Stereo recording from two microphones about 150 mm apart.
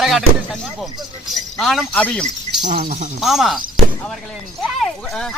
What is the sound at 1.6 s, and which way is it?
A man's voice, centre (ahead or behind).